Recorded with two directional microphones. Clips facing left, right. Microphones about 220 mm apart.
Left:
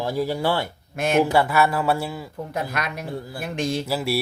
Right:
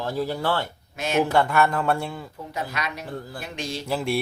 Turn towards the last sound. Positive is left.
turn(degrees=5)  # may be behind; listen again after turning